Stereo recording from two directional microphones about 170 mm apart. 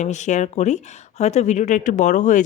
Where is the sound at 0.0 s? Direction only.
45° left (ahead or behind).